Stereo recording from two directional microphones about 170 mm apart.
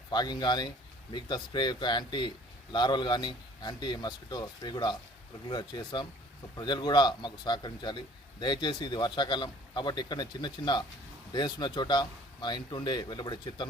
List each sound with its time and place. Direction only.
0.1 s a man's voice: 25° left (ahead or behind)